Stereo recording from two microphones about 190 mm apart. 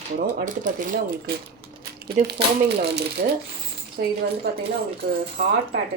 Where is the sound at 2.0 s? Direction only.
55° right (ahead or behind).